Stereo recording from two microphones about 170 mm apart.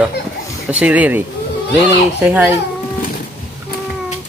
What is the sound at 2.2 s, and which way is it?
Speech, 10° right (ahead or behind).